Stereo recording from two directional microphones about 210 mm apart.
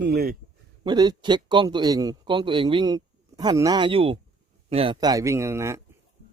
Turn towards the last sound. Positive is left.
turn(degrees=-15)  # may be behind; listen again after turning